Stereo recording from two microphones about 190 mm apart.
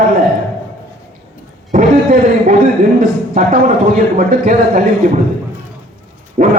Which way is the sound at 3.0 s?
45° right (ahead or behind).